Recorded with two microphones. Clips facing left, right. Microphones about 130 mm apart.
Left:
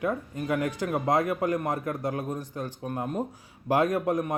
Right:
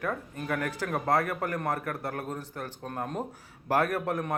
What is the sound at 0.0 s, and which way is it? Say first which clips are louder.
A man's voice: left 4 dB; 20° left (ahead or behind).